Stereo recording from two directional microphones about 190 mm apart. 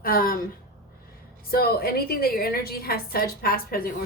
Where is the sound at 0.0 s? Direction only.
50° left (ahead or behind).